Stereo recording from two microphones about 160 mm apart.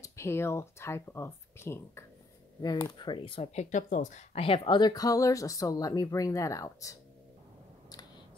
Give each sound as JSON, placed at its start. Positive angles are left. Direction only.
{"t": 0.0, "sound": "speech", "side_deg": 15}